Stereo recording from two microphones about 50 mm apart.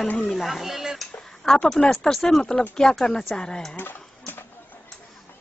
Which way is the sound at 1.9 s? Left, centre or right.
Centre.